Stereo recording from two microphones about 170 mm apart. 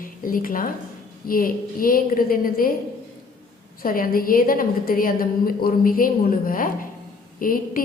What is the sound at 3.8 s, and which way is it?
A woman's voice, 60° left (ahead or behind).